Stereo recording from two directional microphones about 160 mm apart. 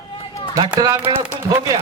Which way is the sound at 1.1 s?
25° right (ahead or behind).